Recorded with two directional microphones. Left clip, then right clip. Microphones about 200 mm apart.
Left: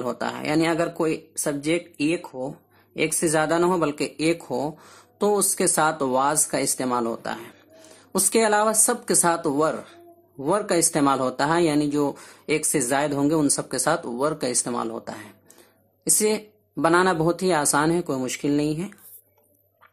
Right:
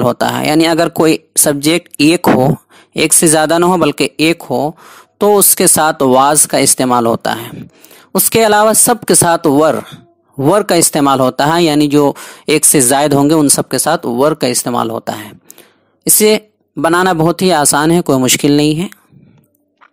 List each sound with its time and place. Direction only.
0.0 s speech: 45° right (ahead or behind)